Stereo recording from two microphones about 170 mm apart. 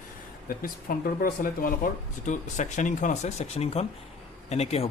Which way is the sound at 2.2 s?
45° left (ahead or behind).